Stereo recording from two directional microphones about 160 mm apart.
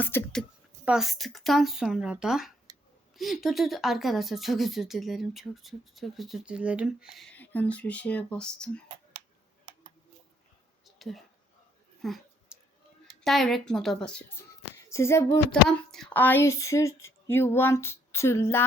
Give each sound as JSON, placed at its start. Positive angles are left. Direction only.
{"t": 0.0, "sound": "speech", "side_deg": 15}
{"t": 0.9, "sound": "speech", "side_deg": 0}
{"t": 7.3, "sound": "speech", "side_deg": 10}
{"t": 10.8, "sound": "a sound", "side_deg": 0}
{"t": 13.2, "sound": "speech", "side_deg": 0}
{"t": 15.9, "sound": "speech", "side_deg": 5}